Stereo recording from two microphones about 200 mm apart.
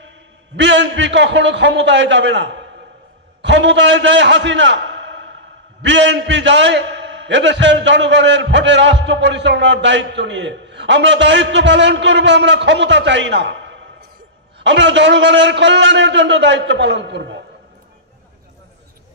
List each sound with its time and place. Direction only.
0.6 s a man's voice: 65° right (ahead or behind)
14.6 s a man's voice: 65° right (ahead or behind)